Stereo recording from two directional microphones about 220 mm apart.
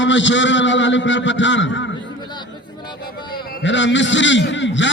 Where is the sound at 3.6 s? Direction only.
55° left (ahead or behind).